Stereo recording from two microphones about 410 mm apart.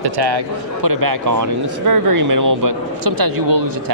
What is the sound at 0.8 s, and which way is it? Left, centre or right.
Speech, right.